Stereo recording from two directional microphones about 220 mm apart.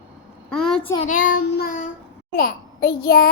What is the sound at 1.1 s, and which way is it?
Child singing, 40° left (ahead or behind).